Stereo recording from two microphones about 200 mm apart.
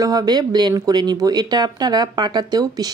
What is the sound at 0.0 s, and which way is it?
Speech, 20° right (ahead or behind).